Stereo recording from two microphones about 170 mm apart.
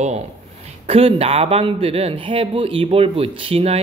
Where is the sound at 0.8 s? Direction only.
35° right (ahead or behind).